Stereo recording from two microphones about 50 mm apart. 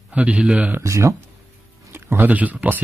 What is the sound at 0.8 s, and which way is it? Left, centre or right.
Speech, right.